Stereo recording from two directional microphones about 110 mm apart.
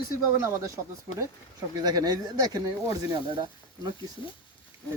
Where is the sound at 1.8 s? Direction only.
35° right (ahead or behind).